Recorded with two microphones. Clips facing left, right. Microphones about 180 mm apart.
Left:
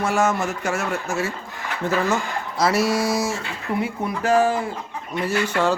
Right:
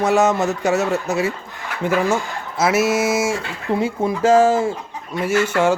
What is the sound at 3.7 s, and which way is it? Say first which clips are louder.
A man's voice: right 5 dB; 25° right (ahead or behind).